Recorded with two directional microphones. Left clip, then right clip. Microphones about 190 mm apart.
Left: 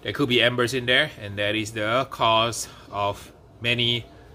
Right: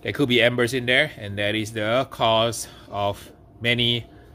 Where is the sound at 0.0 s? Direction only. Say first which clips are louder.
Right 1 dB; 30° right (ahead or behind).